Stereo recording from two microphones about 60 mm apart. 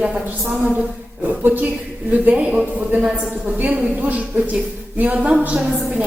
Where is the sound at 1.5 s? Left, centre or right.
Right.